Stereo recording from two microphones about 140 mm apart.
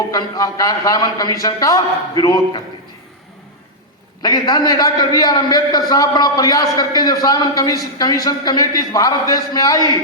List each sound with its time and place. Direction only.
0.1 s a man's voice: 25° left (ahead or behind)
4.2 s a man's voice: 30° left (ahead or behind)